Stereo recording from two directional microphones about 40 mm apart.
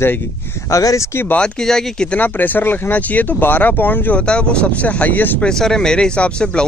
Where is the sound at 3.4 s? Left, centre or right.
Left.